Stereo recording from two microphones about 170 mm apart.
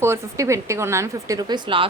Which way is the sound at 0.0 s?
15° right (ahead or behind).